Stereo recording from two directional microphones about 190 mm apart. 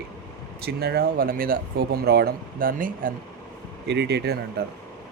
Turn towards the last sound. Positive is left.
turn(degrees=-60)  # may be behind; listen again after turning